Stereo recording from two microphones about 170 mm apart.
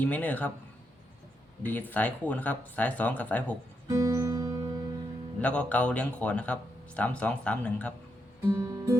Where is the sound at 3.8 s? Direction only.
20° right (ahead or behind).